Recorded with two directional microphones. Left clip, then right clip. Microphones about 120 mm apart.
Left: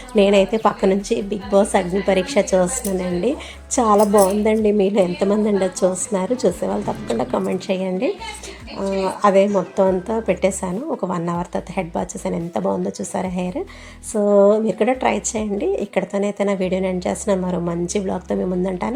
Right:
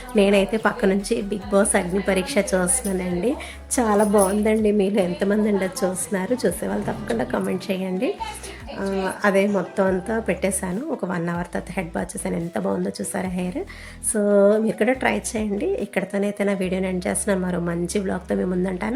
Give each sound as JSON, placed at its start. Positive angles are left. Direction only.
{"t": 0.2, "sound": "a woman's voice", "side_deg": 15}
{"t": 9.2, "sound": "a woman's voice", "side_deg": 15}